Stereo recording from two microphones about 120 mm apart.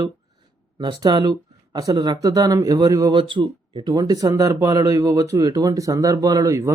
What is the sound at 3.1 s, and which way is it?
Speech, 45° right (ahead or behind).